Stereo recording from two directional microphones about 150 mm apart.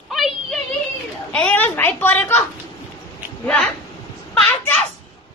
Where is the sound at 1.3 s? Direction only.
10° left (ahead or behind).